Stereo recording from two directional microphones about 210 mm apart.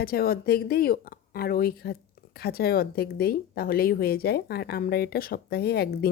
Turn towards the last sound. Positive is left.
turn(degrees=50)  # may be behind; listen again after turning